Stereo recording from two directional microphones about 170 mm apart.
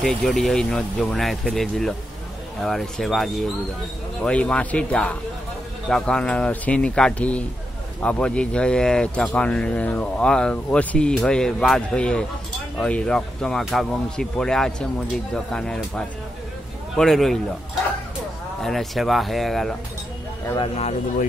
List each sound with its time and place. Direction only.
0.0 s speech: 5° left (ahead or behind)
18.6 s speech: centre (ahead or behind)
20.4 s speech: 25° left (ahead or behind)
20.7 s speech: 40° left (ahead or behind)